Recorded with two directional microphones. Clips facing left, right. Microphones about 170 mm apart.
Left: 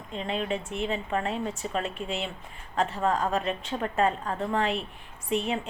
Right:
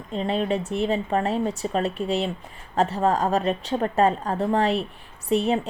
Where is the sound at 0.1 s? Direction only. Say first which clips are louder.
Right 6 dB; 35° right (ahead or behind).